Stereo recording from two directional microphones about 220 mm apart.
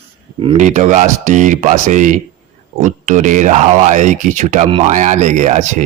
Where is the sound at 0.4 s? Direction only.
30° right (ahead or behind).